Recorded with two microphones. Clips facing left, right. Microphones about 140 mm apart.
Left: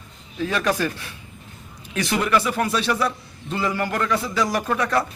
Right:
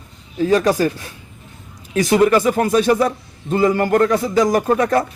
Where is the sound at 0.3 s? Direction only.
40° right (ahead or behind).